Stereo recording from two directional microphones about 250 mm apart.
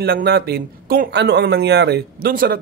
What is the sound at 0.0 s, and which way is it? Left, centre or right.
Speech, right.